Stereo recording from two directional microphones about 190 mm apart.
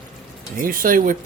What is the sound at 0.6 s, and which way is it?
Speech, 45° right (ahead or behind).